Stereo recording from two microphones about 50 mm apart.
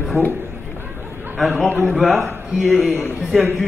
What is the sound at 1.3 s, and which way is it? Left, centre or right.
A man's voice, centre.